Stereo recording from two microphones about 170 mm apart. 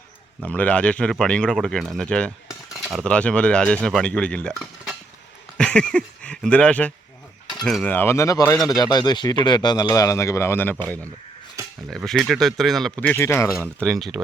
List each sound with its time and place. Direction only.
0.4 s speech: 10° left (ahead or behind)
13.8 s speech: centre (ahead or behind)